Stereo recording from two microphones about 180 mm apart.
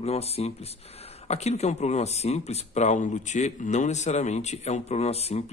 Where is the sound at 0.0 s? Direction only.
35° left (ahead or behind).